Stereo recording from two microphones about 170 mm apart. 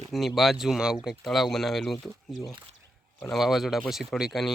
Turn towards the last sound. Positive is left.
turn(degrees=0)  # may be behind; listen again after turning